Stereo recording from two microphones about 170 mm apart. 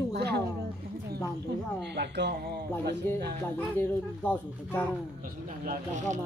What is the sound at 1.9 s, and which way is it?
Speech, 85° right.